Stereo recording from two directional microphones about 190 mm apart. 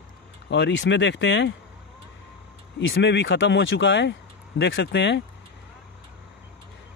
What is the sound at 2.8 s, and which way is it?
Speech, 75° left (ahead or behind).